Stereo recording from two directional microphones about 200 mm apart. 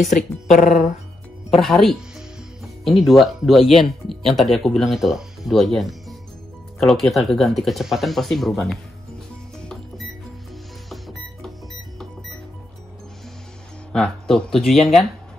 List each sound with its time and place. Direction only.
0.1 s speech: 40° left (ahead or behind)
1.5 s speech: centre (ahead or behind)
9.6 s music: 5° left (ahead or behind)
13.9 s speech: 5° left (ahead or behind)